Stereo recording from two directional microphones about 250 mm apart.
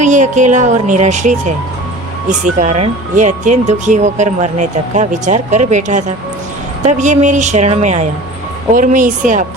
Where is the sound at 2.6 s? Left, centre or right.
Right.